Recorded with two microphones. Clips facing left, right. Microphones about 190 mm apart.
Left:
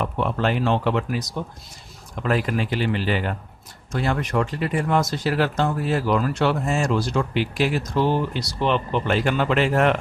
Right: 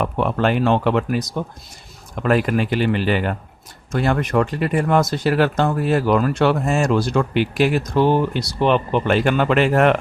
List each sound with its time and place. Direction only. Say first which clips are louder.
0.0 s speech: right 4 dB; 60° right (ahead or behind)